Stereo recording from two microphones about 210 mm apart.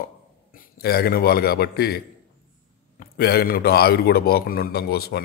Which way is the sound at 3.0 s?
45° left (ahead or behind).